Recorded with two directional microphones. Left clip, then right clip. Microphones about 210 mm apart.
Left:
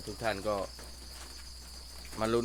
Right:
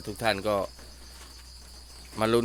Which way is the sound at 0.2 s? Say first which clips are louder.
Right 6 dB; 50° right (ahead or behind).